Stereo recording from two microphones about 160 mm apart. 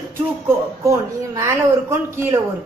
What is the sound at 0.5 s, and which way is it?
Speech, 20° right (ahead or behind).